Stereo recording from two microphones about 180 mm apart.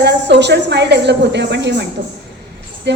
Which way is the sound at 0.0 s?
70° right (ahead or behind).